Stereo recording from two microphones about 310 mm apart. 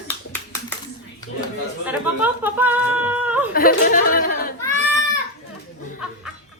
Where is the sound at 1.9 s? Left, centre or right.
Centre.